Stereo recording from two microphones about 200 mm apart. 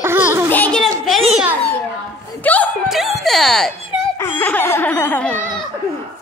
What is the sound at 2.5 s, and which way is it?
Speech, 10° left (ahead or behind).